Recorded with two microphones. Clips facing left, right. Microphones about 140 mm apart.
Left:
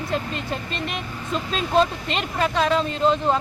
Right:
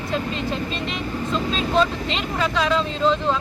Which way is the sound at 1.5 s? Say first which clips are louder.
Left 2 dB; 50° left (ahead or behind).